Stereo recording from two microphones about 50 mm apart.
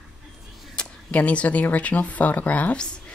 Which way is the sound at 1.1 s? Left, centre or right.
Left.